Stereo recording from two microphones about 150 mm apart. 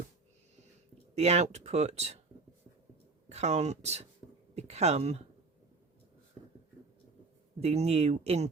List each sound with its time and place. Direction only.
1.1 s speech: 45° right (ahead or behind)
3.2 s speech: 45° right (ahead or behind)
7.6 s speech: 45° right (ahead or behind)